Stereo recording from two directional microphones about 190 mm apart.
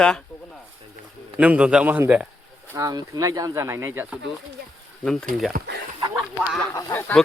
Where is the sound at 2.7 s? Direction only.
20° right (ahead or behind).